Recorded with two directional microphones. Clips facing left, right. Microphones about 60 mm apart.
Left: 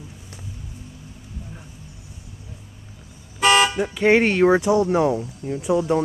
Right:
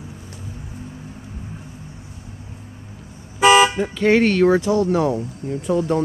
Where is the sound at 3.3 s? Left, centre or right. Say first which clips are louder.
Right 4 dB; centre.